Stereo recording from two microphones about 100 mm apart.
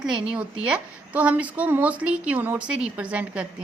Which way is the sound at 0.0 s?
5° right (ahead or behind).